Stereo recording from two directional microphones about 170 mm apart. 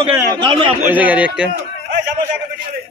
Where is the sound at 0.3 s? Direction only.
30° right (ahead or behind).